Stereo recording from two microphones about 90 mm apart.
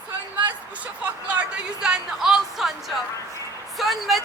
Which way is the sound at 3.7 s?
Centre (ahead or behind).